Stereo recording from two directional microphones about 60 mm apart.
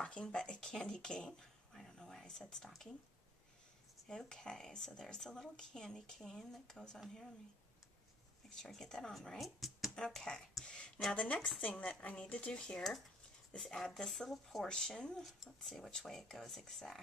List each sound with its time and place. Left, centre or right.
0.0 s speech: centre
4.1 s speech: centre
8.6 s speech: centre
9.9 s speech: centre
15.2 s speech: centre